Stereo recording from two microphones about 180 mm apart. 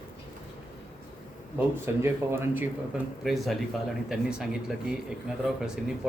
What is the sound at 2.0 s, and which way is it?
Speech, 15° right (ahead or behind).